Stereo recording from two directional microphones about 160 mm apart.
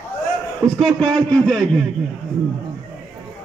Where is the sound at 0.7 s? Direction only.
5° left (ahead or behind).